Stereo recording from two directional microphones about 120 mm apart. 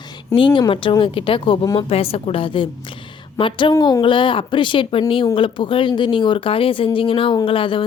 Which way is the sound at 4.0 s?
45° left (ahead or behind).